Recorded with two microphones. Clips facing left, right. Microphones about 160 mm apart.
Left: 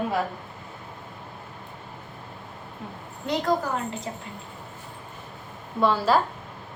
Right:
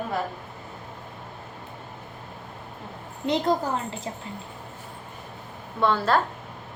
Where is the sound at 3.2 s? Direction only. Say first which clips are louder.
Right 1 dB; 25° right (ahead or behind).